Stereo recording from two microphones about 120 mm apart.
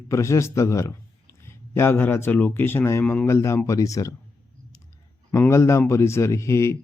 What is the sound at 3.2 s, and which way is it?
Speech, 25° left (ahead or behind).